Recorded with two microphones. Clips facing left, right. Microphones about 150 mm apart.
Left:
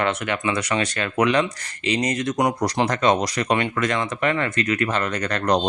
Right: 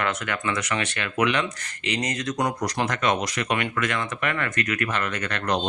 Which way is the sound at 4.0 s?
25° left (ahead or behind).